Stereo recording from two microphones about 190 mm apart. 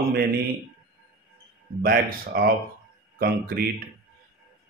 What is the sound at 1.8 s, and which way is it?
Speech, 50° right (ahead or behind).